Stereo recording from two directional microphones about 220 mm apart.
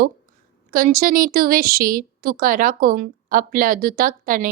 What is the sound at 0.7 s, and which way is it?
A woman's voice, 40° right (ahead or behind).